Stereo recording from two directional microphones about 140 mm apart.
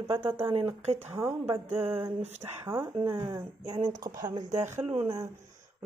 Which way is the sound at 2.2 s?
50° right (ahead or behind).